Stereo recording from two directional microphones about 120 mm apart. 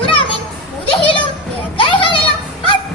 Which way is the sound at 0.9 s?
45° left (ahead or behind).